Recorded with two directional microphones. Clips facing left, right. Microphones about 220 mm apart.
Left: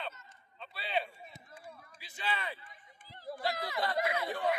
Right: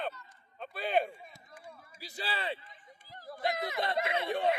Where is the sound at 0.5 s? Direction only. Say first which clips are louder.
Right 6 dB; 50° right (ahead or behind).